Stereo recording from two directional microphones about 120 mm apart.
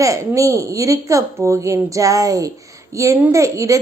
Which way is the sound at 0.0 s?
25° right (ahead or behind).